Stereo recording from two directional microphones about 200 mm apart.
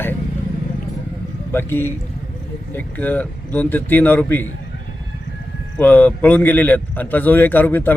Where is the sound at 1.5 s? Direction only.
10° left (ahead or behind).